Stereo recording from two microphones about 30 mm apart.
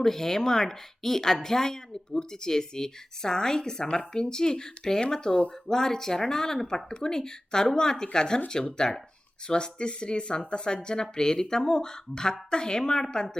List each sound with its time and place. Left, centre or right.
0.0 s speech: centre